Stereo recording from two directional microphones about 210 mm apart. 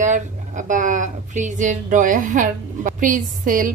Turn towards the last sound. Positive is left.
turn(degrees=-40)  # may be behind; listen again after turning